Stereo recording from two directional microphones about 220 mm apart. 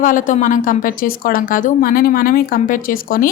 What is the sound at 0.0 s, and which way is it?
A woman's voice, 35° left (ahead or behind).